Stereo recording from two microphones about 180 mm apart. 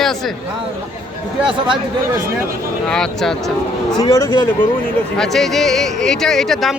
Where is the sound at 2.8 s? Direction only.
5° left (ahead or behind).